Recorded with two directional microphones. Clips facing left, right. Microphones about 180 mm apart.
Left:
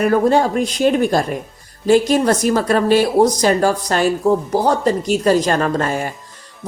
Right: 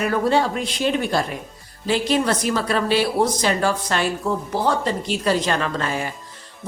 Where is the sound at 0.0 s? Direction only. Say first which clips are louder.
Left 5 dB; 45° left (ahead or behind).